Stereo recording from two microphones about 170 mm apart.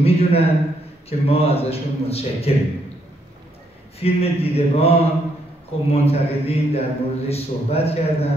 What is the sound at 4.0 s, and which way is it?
Speech, 35° left (ahead or behind).